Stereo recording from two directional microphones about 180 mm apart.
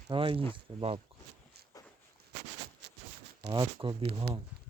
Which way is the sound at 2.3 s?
70° right (ahead or behind).